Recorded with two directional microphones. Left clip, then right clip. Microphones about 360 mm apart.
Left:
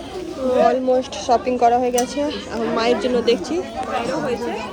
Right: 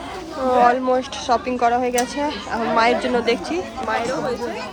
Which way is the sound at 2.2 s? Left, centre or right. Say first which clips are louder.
Even; centre.